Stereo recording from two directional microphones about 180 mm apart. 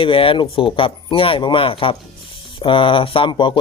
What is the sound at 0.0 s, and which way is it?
Speech, 30° left (ahead or behind).